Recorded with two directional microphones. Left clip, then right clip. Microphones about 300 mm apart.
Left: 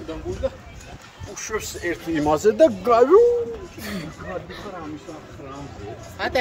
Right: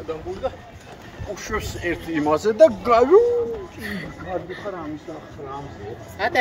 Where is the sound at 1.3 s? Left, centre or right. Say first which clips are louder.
Even; centre.